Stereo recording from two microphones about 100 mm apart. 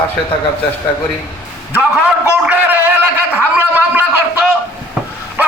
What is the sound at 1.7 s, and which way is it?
A man's voice, 15° right (ahead or behind).